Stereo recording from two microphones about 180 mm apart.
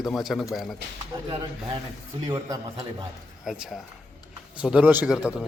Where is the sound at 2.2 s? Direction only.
20° right (ahead or behind).